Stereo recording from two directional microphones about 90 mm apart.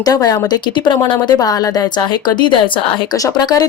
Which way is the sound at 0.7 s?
60° left (ahead or behind).